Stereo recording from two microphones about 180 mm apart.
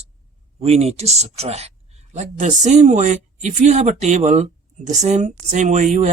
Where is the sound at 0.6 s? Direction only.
35° right (ahead or behind).